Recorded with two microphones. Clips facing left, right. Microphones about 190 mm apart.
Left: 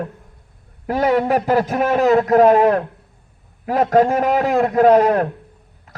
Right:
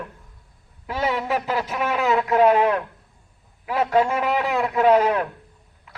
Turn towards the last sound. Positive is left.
turn(degrees=45)  # may be behind; listen again after turning